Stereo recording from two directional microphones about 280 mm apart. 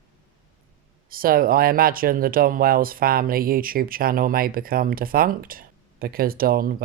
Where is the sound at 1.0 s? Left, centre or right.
Right.